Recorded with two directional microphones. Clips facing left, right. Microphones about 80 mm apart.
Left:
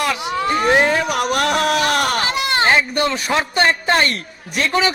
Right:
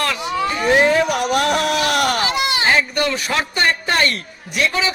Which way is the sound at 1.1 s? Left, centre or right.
Left.